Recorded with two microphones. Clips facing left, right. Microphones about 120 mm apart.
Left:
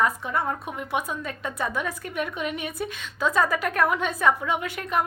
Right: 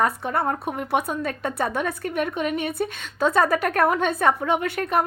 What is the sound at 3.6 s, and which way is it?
Speech, 60° right (ahead or behind).